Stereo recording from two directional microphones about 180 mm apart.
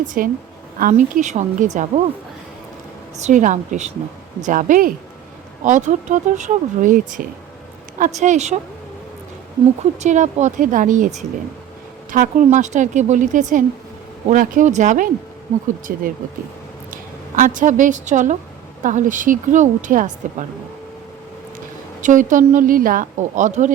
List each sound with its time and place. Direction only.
0.0 s a woman's voice: 45° right (ahead or behind)
3.2 s a woman's voice: 40° right (ahead or behind)
10.0 s a woman's voice: 40° right (ahead or behind)
22.0 s speech: 45° right (ahead or behind)